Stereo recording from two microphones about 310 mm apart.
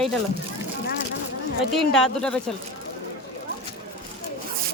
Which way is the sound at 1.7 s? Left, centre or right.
Centre.